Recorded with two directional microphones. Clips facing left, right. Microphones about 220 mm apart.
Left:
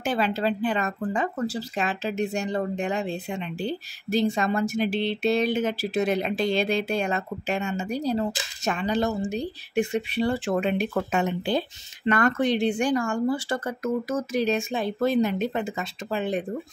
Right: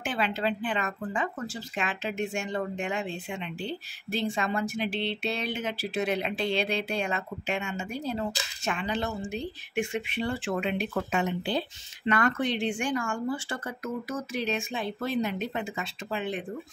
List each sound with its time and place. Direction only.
0.0 s a woman's voice: 40° left (ahead or behind)